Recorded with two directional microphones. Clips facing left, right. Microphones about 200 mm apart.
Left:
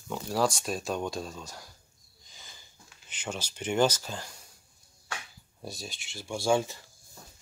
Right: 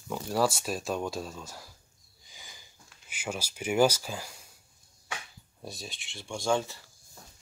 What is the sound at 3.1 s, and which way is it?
Speech, 10° right (ahead or behind).